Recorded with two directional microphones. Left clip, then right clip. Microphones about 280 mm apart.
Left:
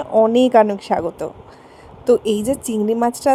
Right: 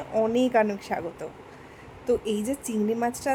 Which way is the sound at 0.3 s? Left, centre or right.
Left.